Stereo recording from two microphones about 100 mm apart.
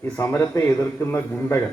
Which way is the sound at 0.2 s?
25° left (ahead or behind).